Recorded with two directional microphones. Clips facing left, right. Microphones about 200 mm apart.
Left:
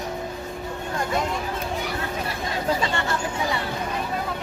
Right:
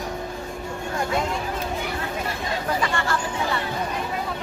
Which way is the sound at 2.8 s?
20° left (ahead or behind).